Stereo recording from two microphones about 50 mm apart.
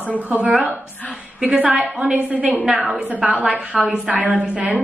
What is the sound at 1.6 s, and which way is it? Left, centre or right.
A woman's voice, right.